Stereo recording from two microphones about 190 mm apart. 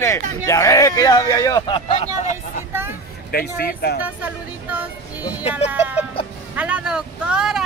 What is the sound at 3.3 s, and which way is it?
Speech, 55° left (ahead or behind).